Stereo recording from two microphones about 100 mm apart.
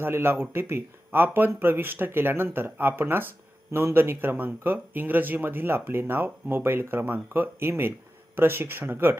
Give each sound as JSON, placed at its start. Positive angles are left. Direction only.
{"t": 0.0, "sound": "speech", "side_deg": -25}